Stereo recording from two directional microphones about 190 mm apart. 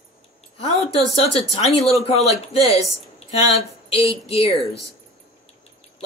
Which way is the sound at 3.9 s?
30° left (ahead or behind).